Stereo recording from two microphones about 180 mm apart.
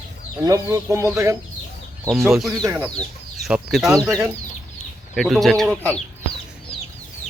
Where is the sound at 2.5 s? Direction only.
15° right (ahead or behind).